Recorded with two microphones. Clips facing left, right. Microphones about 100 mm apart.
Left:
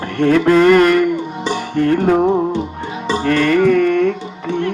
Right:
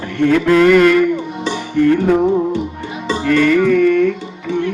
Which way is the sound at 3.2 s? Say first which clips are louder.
Right 1 dB; 45° left (ahead or behind).